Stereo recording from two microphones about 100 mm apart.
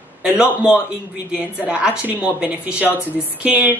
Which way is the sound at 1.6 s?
10° right (ahead or behind).